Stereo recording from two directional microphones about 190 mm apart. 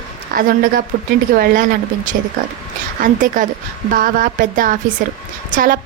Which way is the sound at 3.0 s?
45° right (ahead or behind).